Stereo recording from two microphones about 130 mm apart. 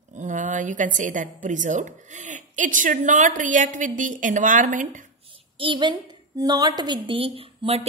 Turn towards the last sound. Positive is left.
turn(degrees=-45)  # may be behind; listen again after turning